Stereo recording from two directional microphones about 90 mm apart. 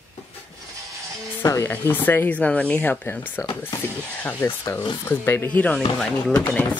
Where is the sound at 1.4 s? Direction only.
35° left (ahead or behind).